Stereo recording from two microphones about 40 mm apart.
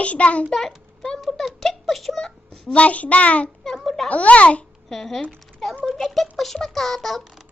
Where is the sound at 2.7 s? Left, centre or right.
Left.